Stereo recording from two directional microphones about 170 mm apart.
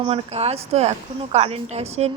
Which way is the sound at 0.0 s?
35° right (ahead or behind).